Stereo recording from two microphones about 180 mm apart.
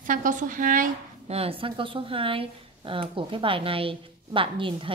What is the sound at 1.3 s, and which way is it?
A woman's voice, 30° right (ahead or behind).